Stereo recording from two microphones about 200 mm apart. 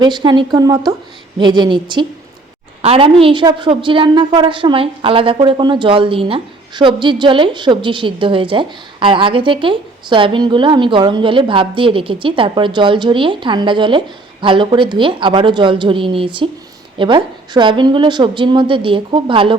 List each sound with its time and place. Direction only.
0.0 s a woman's voice: 20° right (ahead or behind)